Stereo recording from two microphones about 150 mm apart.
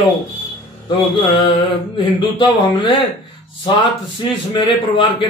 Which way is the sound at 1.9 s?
30° left (ahead or behind).